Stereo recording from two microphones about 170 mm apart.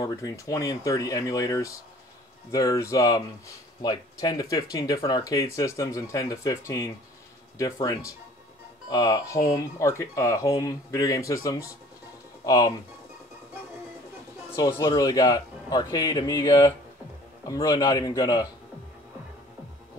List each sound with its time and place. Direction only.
0.0 s speech: 20° left (ahead or behind)
14.5 s speech: 20° left (ahead or behind)